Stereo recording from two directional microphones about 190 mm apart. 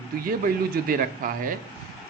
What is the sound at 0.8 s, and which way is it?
Speech, 45° right (ahead or behind).